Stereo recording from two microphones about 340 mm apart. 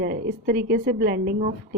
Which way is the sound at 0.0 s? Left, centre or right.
Right.